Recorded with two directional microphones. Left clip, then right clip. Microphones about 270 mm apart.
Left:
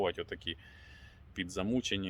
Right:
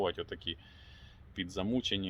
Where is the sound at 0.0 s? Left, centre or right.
Centre.